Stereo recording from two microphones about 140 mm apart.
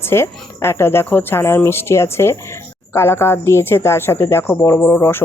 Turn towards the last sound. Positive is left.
turn(degrees=15)  # may be behind; listen again after turning